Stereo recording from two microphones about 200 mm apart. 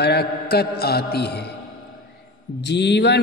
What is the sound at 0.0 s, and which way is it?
Mantra, 55° left (ahead or behind).